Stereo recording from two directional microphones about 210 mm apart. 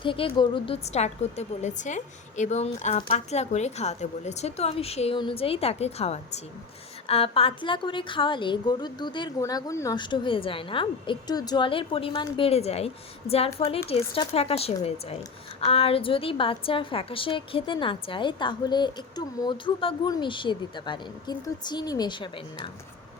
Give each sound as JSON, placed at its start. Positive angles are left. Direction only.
{"t": 0.0, "sound": "a woman's voice", "side_deg": 25}